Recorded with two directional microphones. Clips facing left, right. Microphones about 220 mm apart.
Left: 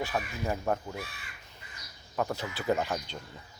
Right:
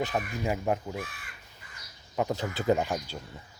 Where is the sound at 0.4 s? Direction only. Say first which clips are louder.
Right 2 dB; 15° right (ahead or behind).